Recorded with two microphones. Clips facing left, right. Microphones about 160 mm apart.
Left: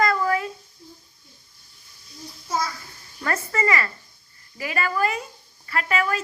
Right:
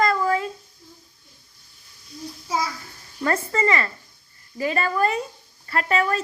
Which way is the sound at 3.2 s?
30° right (ahead or behind).